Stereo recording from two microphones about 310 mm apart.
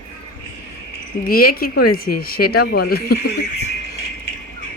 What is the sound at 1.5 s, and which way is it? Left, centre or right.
A woman's voice, left.